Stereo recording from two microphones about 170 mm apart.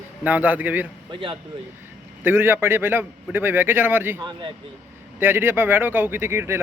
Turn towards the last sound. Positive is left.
turn(degrees=-15)  # may be behind; listen again after turning